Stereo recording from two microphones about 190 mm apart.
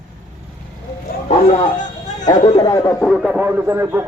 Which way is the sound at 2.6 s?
20° left (ahead or behind).